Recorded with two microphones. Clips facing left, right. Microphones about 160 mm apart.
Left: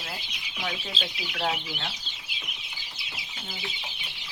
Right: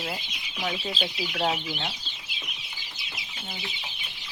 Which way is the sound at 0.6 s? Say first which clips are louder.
Right 4 dB; 10° right (ahead or behind).